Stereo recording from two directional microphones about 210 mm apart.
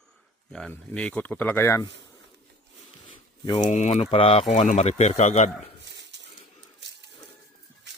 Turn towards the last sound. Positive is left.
turn(degrees=-55)  # may be behind; listen again after turning